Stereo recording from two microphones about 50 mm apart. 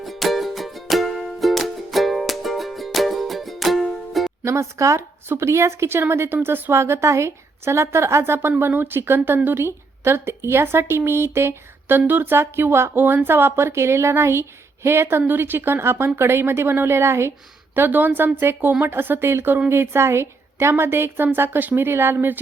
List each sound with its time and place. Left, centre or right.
0.0 s music: centre
4.4 s a woman's voice: right
5.4 s speech: right
6.7 s a woman's voice: right
8.2 s a woman's voice: right
11.9 s a woman's voice: right
15.3 s speech: right
17.7 s a woman's voice: right